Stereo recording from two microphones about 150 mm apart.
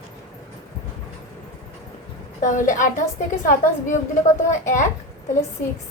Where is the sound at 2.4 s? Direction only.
55° left (ahead or behind).